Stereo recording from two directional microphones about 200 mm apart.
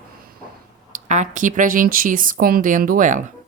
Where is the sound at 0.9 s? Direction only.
40° right (ahead or behind).